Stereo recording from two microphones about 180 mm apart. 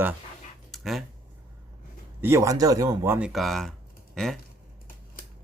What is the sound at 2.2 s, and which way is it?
Speech, 15° right (ahead or behind).